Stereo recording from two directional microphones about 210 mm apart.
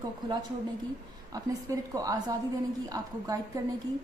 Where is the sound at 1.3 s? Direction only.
15° right (ahead or behind).